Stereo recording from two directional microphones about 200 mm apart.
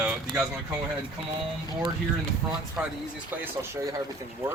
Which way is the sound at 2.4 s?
5° right (ahead or behind).